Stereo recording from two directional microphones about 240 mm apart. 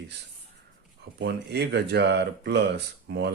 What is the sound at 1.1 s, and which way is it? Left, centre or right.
Speech, right.